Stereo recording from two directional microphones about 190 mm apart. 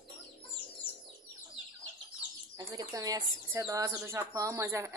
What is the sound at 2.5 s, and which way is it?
Speech, 20° right (ahead or behind).